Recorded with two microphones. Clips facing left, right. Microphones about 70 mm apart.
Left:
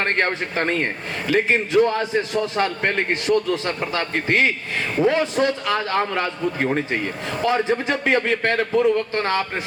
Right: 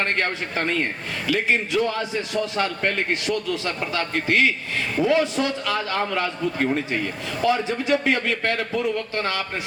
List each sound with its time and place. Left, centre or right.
0.0 s a man's voice: left